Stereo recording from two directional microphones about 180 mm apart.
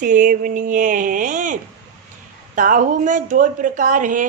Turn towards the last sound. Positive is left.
turn(degrees=-45)  # may be behind; listen again after turning